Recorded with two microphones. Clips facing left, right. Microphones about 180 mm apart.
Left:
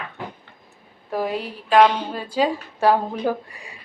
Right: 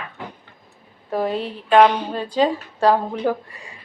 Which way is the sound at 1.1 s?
5° left (ahead or behind).